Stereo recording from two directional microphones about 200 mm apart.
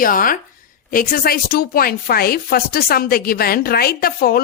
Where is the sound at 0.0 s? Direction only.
45° left (ahead or behind).